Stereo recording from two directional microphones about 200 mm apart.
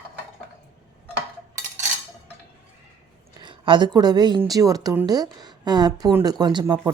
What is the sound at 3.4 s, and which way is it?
A woman's voice, 25° right (ahead or behind).